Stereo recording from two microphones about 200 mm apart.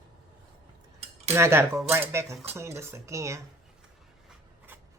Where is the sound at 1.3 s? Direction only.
15° right (ahead or behind).